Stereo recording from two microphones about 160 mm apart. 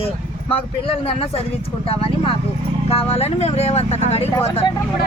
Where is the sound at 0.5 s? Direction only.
35° left (ahead or behind).